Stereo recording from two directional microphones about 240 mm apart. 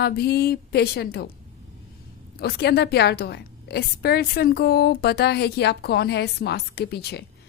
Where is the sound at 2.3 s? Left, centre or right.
Left.